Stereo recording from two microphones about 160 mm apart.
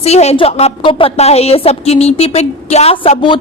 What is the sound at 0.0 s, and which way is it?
A woman's voice, 40° left (ahead or behind).